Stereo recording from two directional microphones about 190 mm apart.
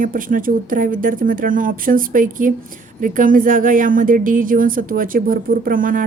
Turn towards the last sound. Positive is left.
turn(degrees=-45)  # may be behind; listen again after turning